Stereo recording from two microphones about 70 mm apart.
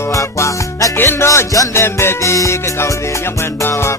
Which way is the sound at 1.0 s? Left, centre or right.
Left.